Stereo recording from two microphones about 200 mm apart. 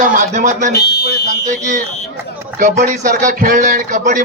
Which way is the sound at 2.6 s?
40° right (ahead or behind).